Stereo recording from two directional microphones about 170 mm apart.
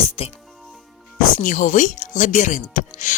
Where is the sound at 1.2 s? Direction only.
50° left (ahead or behind).